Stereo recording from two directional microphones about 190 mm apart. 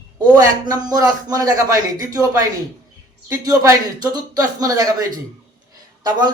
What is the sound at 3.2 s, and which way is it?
A man's voice, 15° right (ahead or behind).